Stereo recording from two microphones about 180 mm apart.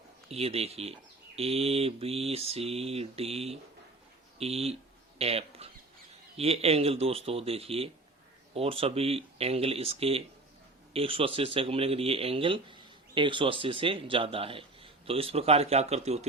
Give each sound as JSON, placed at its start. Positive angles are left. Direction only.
{"t": 0.3, "sound": "speech", "side_deg": -35}
{"t": 4.4, "sound": "a sound", "side_deg": -35}
{"t": 6.3, "sound": "speech", "side_deg": -35}